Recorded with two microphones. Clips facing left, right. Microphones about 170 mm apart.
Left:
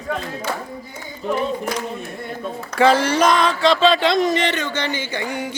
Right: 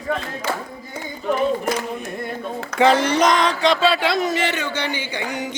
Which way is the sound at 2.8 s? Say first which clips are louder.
Left 1 dB; 20° right (ahead or behind).